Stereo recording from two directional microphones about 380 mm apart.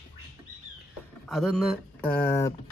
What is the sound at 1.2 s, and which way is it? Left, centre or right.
Speech, centre.